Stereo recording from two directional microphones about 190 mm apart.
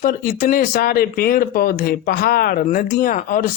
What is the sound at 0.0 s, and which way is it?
Speech, 45° left (ahead or behind).